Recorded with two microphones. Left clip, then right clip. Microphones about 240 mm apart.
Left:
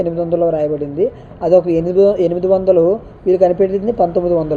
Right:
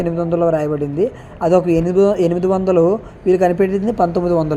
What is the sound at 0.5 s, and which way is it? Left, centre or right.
Speech, right.